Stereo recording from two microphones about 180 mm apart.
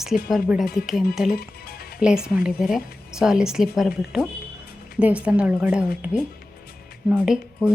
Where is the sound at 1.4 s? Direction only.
60° left (ahead or behind).